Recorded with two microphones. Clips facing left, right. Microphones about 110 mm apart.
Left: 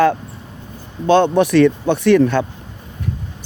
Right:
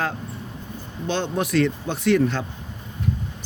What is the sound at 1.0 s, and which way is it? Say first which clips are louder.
Speech: left 13 dB; 55° left (ahead or behind).